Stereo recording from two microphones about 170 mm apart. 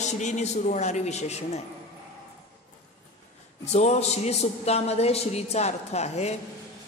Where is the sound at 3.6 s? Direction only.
40° left (ahead or behind).